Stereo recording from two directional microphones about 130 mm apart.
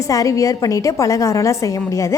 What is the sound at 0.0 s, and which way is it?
A woman's voice, 25° left (ahead or behind).